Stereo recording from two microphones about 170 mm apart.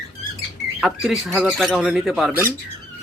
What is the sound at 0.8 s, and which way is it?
Speech, centre (ahead or behind).